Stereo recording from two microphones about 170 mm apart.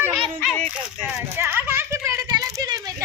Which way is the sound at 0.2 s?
5° left (ahead or behind).